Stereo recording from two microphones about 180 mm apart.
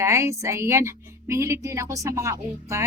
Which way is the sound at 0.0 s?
15° right (ahead or behind).